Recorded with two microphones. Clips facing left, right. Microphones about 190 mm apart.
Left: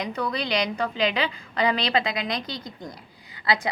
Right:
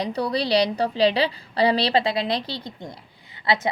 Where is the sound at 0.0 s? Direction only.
35° right (ahead or behind).